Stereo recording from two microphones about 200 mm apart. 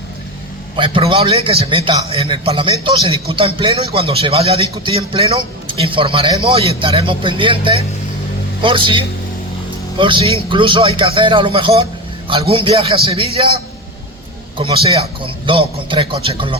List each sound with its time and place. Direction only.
0.8 s a man's voice: 25° right (ahead or behind)
14.6 s a man's voice: 25° right (ahead or behind)